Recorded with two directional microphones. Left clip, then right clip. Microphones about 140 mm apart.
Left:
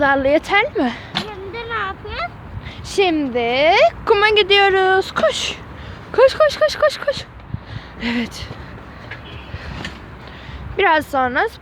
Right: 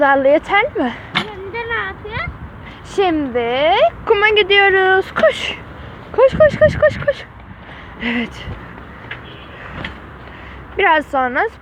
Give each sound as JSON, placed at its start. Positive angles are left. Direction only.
{"t": 0.0, "sound": "speech", "side_deg": 5}
{"t": 1.5, "sound": "a sound", "side_deg": 20}
{"t": 2.9, "sound": "speech", "side_deg": 10}
{"t": 3.3, "sound": "speech", "side_deg": 35}
{"t": 4.0, "sound": "speech", "side_deg": 20}
{"t": 6.1, "sound": "speech", "side_deg": 25}
{"t": 10.8, "sound": "speech", "side_deg": 15}